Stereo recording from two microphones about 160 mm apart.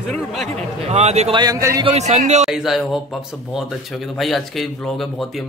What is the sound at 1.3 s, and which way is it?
Speech, 25° right (ahead or behind).